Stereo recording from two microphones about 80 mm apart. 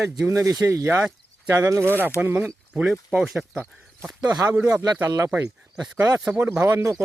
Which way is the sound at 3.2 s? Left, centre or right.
Centre.